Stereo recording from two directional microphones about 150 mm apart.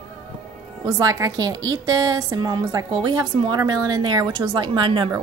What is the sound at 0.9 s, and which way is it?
A woman's voice, 25° right (ahead or behind).